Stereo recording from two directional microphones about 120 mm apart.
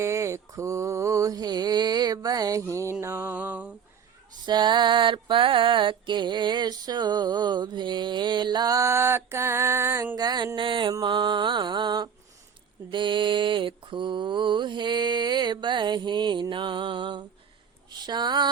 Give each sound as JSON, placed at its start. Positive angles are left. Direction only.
{"t": 0.0, "sound": "mantra", "side_deg": -25}
{"t": 3.3, "sound": "a sound", "side_deg": -10}
{"t": 4.4, "sound": "music", "side_deg": -40}
{"t": 10.2, "sound": "music", "side_deg": -35}